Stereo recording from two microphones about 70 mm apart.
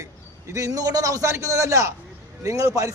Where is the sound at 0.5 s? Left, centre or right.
Right.